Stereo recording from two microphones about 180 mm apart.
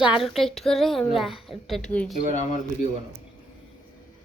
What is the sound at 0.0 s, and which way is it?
A woman's voice, 5° right (ahead or behind).